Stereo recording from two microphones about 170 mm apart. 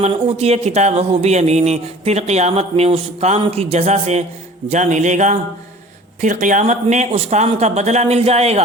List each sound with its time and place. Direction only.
0.0 s speech: 35° right (ahead or behind)